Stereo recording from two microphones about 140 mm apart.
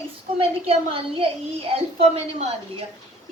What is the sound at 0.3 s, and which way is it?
A woman's voice, 40° right (ahead or behind).